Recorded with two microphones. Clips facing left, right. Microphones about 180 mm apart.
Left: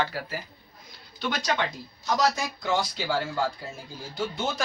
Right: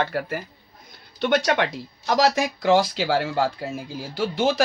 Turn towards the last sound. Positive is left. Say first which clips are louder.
# right 9 dB
turn(degrees=-90)